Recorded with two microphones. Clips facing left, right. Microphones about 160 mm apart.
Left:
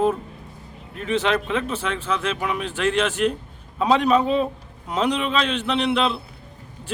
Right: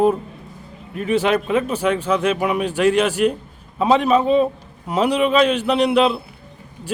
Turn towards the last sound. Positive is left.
turn(degrees=-10)  # may be behind; listen again after turning